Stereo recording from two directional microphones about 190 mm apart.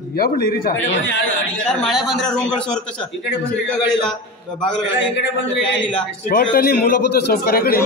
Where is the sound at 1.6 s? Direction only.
Centre (ahead or behind).